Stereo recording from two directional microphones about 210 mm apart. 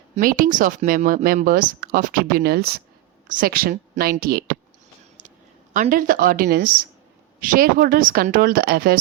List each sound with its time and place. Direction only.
0.2 s speech: 45° right (ahead or behind)
5.7 s speech: 40° right (ahead or behind)